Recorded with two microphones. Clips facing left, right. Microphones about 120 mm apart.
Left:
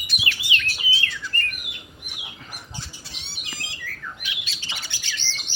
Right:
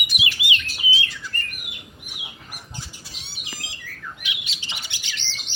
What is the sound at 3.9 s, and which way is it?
Bird, 20° right (ahead or behind).